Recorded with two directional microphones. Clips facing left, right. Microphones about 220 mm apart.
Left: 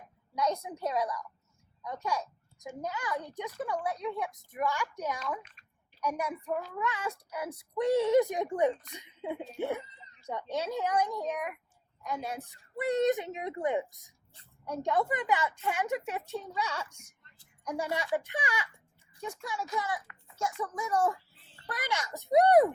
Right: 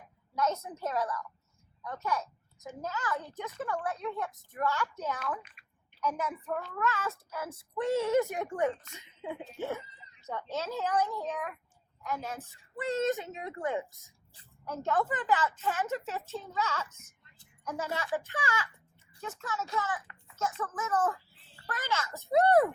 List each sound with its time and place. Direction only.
0.3 s a child's voice: 15° left (ahead or behind)
5.6 s a sound: 10° right (ahead or behind)
6.0 s a child's voice: 15° left (ahead or behind)
14.8 s a child's voice: 15° left (ahead or behind)